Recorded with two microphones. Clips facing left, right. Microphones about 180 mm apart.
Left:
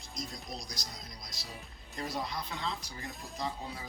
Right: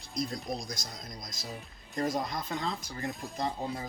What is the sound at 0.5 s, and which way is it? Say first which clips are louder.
Speech: right 4 dB; 50° right (ahead or behind).